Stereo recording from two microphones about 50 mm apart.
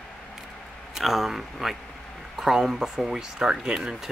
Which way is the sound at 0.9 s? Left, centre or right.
Centre.